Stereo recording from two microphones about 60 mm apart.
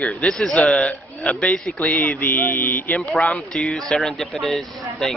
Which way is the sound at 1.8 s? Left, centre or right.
Left.